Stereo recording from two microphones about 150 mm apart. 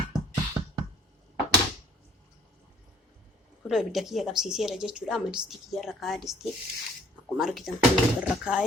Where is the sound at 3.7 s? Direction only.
Centre (ahead or behind).